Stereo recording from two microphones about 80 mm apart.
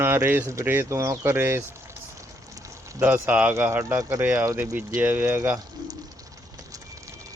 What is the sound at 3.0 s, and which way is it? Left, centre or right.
Speech, right.